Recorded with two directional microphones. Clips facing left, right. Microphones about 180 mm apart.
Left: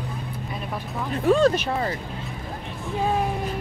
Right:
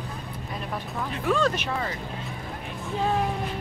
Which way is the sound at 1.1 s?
35° left (ahead or behind).